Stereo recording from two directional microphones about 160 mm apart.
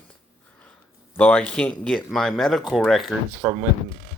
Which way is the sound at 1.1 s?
10° left (ahead or behind).